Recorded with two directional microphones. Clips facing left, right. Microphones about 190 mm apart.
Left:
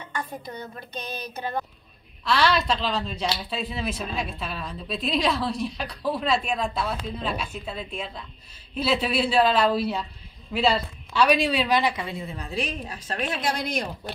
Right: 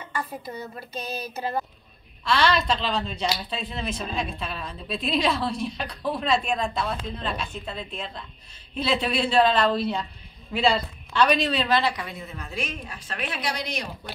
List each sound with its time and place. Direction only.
0.1 s a woman's voice: 5° right (ahead or behind); by 11.9 s 10° left (ahead or behind)
11.9 s a woman's voice: 25° left (ahead or behind); by 13.8 s 50° left (ahead or behind)